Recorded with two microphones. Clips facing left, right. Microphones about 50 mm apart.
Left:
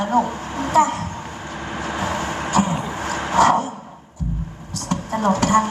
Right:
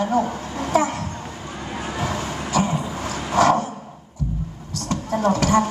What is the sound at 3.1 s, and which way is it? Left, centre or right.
Dog, left.